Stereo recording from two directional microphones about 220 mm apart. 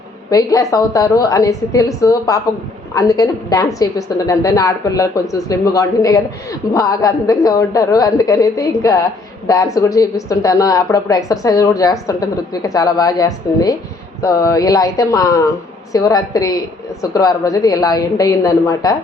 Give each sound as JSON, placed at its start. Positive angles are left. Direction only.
{"t": 0.3, "sound": "a woman's voice", "side_deg": 15}